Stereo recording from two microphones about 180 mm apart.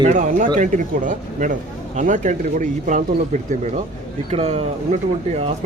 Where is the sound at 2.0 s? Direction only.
45° right (ahead or behind).